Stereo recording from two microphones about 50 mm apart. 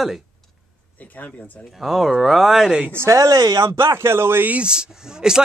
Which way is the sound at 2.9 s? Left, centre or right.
Right.